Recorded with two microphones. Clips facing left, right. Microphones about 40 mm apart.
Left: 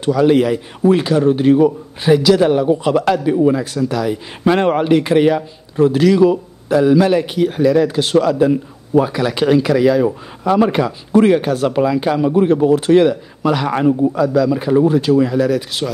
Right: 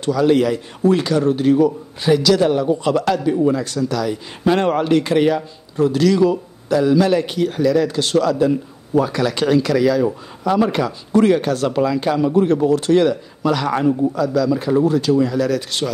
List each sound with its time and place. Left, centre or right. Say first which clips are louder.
0.0 s a man's voice: left 2 dB; centre